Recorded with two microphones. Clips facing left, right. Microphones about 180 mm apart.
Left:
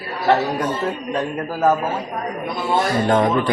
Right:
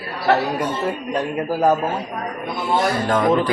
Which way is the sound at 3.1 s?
25° left (ahead or behind).